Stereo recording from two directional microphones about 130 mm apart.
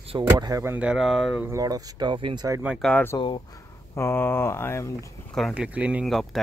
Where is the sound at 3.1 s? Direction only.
40° left (ahead or behind).